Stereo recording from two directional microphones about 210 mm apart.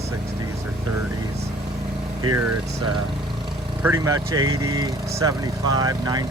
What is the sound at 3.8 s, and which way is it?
Speech, 15° right (ahead or behind).